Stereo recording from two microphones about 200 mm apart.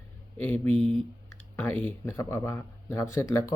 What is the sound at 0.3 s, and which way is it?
Speech, 10° left (ahead or behind).